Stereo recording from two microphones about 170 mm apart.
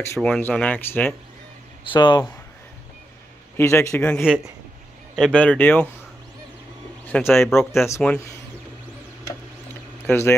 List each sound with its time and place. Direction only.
0.0 s a man's voice: 15° left (ahead or behind)
1.9 s speech: 25° left (ahead or behind)
3.5 s a man's voice: 15° left (ahead or behind)
7.1 s a man's voice: 10° left (ahead or behind)
10.0 s speech: 15° left (ahead or behind)